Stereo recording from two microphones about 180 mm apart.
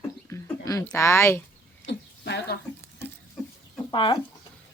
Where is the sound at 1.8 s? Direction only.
70° left (ahead or behind).